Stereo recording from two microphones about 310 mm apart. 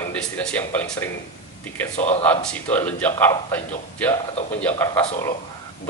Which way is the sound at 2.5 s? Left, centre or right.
Centre.